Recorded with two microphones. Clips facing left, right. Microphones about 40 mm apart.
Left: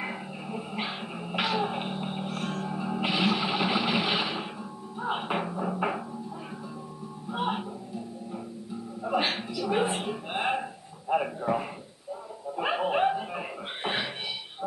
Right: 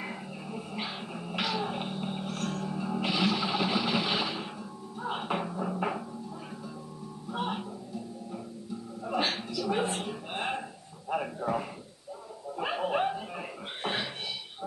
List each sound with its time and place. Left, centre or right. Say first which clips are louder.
0.0 s dog: left 3 dB; left
4.9 s music: left 3 dB; centre
7.2 s music: left 3 dB; left
9.0 s a sound: left 3 dB; left